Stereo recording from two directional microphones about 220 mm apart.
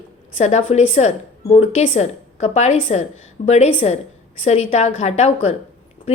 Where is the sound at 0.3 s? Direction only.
30° left (ahead or behind).